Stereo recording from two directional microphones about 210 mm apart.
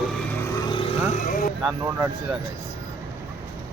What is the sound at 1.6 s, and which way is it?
Speech, 10° right (ahead or behind).